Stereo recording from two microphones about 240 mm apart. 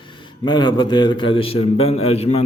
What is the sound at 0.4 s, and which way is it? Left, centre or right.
A man's voice, centre.